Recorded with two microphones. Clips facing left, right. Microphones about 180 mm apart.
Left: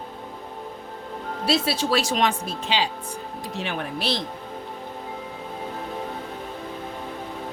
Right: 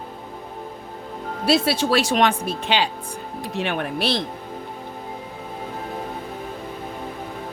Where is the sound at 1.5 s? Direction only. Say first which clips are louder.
Right 4 dB; 60° right (ahead or behind).